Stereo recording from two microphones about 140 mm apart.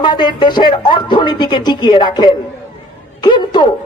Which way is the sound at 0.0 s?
30° left (ahead or behind).